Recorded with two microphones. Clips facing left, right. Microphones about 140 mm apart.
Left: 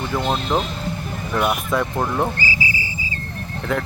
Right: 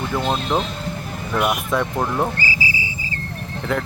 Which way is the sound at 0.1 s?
Centre (ahead or behind).